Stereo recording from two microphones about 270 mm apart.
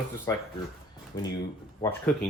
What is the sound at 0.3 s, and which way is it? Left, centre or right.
Speech, centre.